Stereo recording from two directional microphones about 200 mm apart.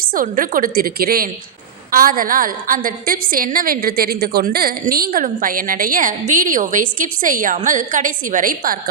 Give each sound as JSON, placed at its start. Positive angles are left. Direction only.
{"t": 0.0, "sound": "a woman's voice", "side_deg": -45}